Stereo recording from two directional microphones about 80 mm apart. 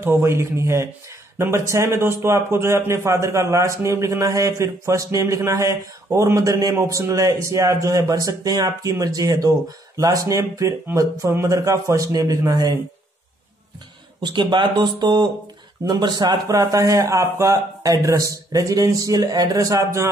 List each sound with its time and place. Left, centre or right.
0.0 s a man's voice: right
14.2 s a man's voice: right